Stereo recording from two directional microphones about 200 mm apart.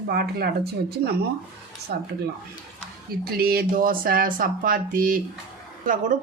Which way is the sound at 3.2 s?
50° right (ahead or behind).